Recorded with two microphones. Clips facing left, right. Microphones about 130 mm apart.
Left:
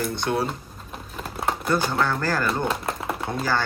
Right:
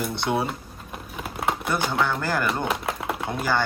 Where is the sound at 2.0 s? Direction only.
15° right (ahead or behind).